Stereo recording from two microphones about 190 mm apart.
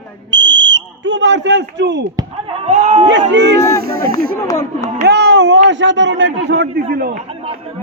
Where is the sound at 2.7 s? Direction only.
35° right (ahead or behind).